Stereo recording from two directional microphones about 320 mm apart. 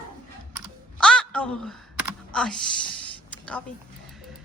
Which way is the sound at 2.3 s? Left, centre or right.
Centre.